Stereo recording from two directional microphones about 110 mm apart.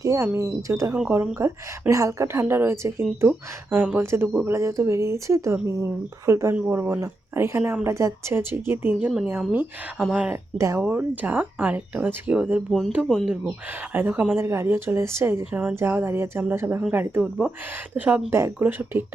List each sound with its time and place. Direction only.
0.0 s a woman's voice: 30° right (ahead or behind); by 10.3 s 10° right (ahead or behind)
10.6 s a woman's voice: 25° right (ahead or behind)
10.8 s a woman's voice: 15° right (ahead or behind)